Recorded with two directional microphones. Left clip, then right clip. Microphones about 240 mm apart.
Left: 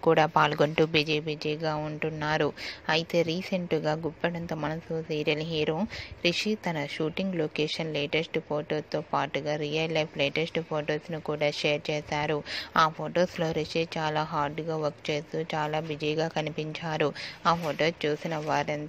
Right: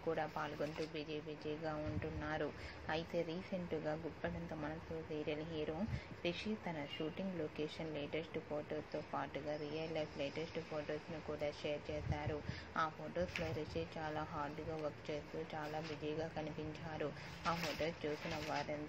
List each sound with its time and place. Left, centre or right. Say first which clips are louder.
0.0 s speech: left 19 dB; left